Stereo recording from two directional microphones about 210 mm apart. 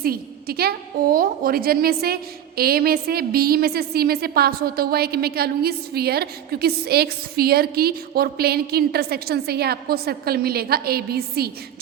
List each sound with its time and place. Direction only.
0.0 s a woman's voice: 45° right (ahead or behind)